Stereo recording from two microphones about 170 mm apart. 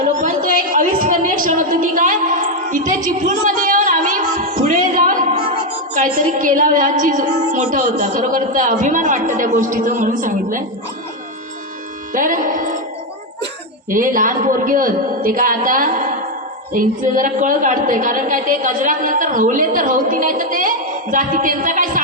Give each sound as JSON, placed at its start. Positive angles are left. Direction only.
{"t": 0.0, "sound": "a sound", "side_deg": -55}
{"t": 5.9, "sound": "a woman's voice", "side_deg": -50}
{"t": 12.1, "sound": "a woman's voice", "side_deg": -50}
{"t": 13.9, "sound": "a woman's voice", "side_deg": -50}